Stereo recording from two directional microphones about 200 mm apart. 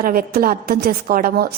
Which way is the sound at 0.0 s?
45° right (ahead or behind).